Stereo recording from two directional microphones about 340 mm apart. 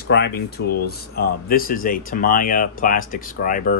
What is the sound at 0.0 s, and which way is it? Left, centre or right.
Speech, left.